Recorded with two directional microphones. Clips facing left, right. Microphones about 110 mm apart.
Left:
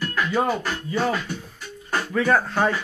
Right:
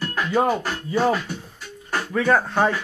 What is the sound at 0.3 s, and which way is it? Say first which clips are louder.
Speech: right 4 dB; 25° right (ahead or behind).